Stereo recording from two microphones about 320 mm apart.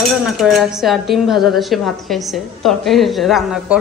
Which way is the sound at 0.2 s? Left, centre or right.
Centre.